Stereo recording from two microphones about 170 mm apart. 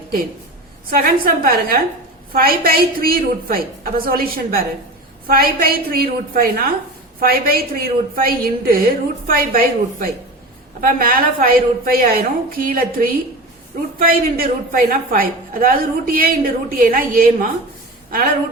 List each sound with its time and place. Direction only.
0.9 s a woman's voice: 60° right (ahead or behind)